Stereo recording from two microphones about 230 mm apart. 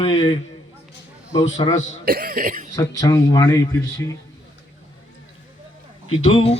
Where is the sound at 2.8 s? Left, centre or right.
Centre.